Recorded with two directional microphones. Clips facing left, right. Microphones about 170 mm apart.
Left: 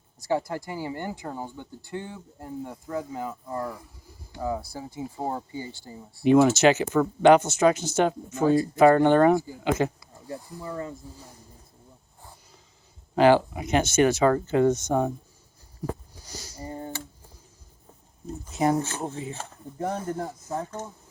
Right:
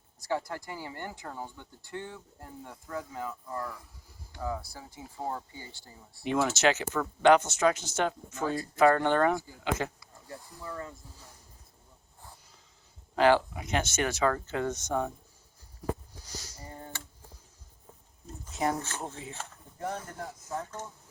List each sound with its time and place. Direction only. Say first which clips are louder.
0.2 s speech: left 6 dB; 15° left (ahead or behind)
5.5 s speech: left 11 dB; 15° left (ahead or behind)
13.1 s speech: left 5 dB; 10° left (ahead or behind)
16.6 s typing: left 12 dB; 25° left (ahead or behind)
18.4 s speech: left 7 dB; 5° left (ahead or behind)
19.3 s speech: left 6 dB; 35° left (ahead or behind)